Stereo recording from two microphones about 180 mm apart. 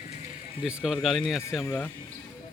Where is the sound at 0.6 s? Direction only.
5° right (ahead or behind).